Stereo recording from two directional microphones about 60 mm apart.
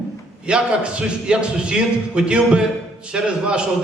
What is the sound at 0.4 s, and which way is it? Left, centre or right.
A man's voice, centre.